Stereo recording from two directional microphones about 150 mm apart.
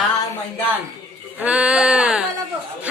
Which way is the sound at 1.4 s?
5° right (ahead or behind).